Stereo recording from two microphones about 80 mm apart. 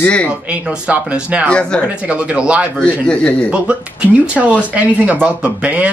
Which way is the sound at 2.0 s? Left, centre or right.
Centre.